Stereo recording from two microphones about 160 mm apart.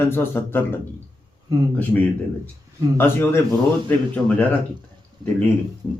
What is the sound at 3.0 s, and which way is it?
Speech, 15° left (ahead or behind).